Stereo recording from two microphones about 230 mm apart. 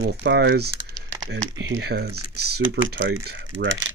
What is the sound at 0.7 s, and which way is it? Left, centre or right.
Typing, centre.